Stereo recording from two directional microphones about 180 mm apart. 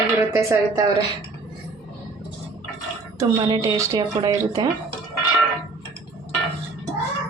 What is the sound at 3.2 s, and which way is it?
Speech, 20° right (ahead or behind).